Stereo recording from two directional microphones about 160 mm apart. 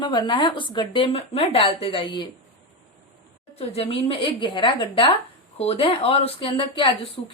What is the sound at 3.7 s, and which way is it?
A woman's voice, 35° left (ahead or behind).